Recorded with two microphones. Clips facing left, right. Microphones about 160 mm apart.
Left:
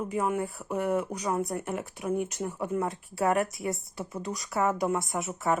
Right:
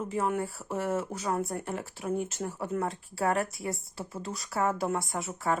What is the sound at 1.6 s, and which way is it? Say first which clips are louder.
Speech: left 2 dB; 20° left (ahead or behind).